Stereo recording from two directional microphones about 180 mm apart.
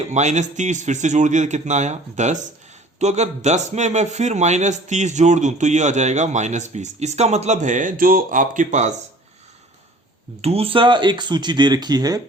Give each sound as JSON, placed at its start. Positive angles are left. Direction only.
{"t": 0.0, "sound": "a man's voice", "side_deg": -40}
{"t": 10.4, "sound": "speech", "side_deg": -35}